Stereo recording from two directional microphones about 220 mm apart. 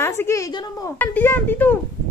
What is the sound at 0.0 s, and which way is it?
Speech, 10° left (ahead or behind).